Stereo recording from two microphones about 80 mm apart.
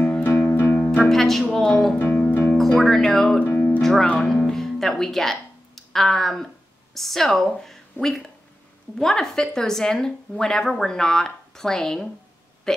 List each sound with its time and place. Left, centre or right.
0.0 s music: centre
1.0 s speech: centre
3.4 s music: left
3.8 s speech: centre
12.7 s burping: centre